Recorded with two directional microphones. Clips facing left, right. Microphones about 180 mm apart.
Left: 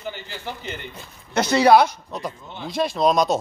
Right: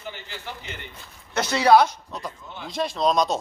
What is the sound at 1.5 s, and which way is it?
A man's voice, 10° left (ahead or behind).